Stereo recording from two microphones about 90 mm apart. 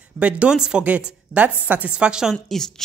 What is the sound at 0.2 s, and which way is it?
Speech, 15° right (ahead or behind).